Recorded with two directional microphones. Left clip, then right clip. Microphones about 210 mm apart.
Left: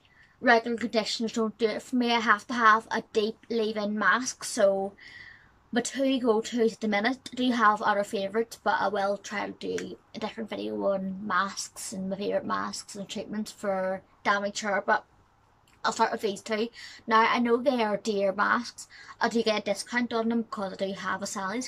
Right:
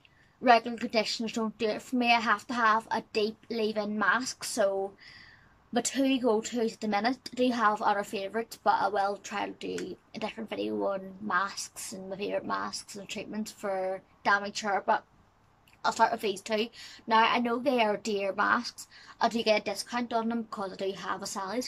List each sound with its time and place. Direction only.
0.4 s a woman's voice: 10° right (ahead or behind)